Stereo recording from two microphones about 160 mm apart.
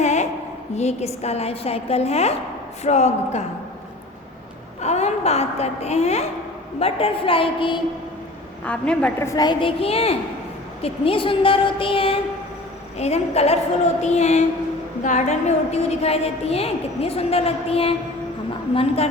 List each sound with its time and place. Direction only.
0.0 s a sound: 45° left (ahead or behind)
0.8 s a woman's voice: 45° left (ahead or behind)
4.8 s a woman's voice: 45° left (ahead or behind)
8.6 s a woman's voice: 10° left (ahead or behind); by 19.0 s 35° left (ahead or behind)